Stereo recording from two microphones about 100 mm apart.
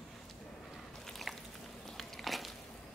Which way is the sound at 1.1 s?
Centre (ahead or behind).